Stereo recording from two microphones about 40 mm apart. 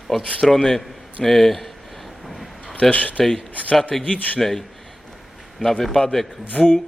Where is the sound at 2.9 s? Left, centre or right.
Left.